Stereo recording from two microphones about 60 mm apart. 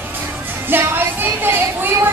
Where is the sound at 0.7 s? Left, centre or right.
Right.